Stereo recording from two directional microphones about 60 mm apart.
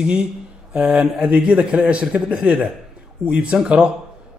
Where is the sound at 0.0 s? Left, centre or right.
Centre.